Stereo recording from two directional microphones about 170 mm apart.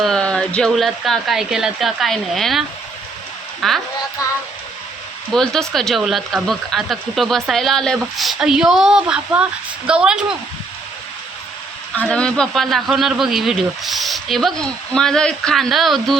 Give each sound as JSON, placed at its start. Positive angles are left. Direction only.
{"t": 0.0, "sound": "speech", "side_deg": 5}
{"t": 4.2, "sound": "speech", "side_deg": 20}
{"t": 5.3, "sound": "speech", "side_deg": 5}
{"t": 11.9, "sound": "speech", "side_deg": 5}